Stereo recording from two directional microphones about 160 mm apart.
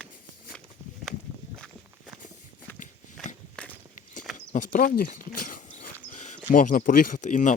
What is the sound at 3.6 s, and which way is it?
Walk, 5° left (ahead or behind).